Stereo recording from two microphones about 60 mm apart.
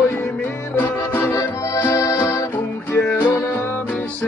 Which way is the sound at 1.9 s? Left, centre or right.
Left.